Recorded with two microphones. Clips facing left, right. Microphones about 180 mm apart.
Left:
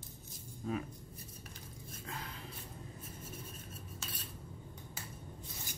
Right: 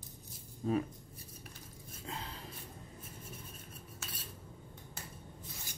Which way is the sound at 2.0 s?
25° right (ahead or behind).